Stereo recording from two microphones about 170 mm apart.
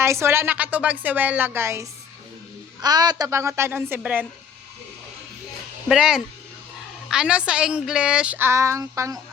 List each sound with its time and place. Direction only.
0.0 s speech: 15° right (ahead or behind)
5.9 s speech: 5° right (ahead or behind)